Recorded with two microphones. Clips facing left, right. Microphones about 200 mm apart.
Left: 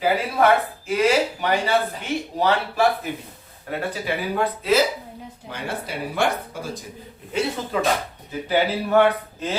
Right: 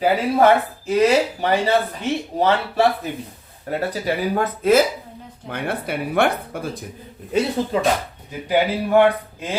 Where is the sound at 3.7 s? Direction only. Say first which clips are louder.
Right 4 dB; 40° right (ahead or behind).